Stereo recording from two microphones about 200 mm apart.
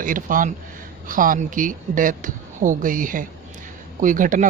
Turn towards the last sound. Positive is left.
turn(degrees=-40)  # may be behind; listen again after turning